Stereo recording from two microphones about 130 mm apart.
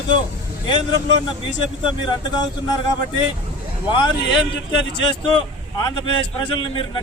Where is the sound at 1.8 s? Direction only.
35° left (ahead or behind).